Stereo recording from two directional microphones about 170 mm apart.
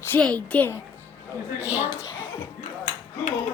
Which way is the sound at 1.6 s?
10° right (ahead or behind).